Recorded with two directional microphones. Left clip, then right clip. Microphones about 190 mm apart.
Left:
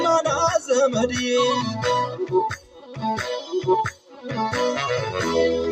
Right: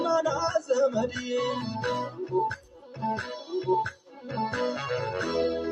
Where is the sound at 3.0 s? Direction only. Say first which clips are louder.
Left 5 dB; 45° left (ahead or behind).